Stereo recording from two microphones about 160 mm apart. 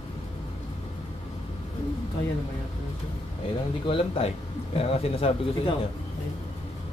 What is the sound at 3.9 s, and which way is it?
Speech, 35° left (ahead or behind).